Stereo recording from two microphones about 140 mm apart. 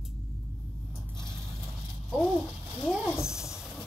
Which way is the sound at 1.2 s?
5° left (ahead or behind).